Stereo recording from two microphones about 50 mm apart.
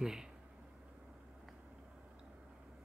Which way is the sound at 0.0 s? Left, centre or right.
Centre.